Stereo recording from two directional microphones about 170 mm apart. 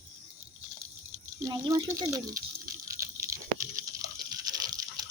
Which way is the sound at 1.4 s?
20° right (ahead or behind).